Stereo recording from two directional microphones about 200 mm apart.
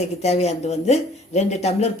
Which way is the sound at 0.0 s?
30° left (ahead or behind).